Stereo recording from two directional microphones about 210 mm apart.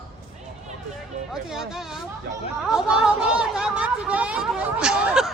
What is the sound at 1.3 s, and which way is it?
Speech, centre (ahead or behind).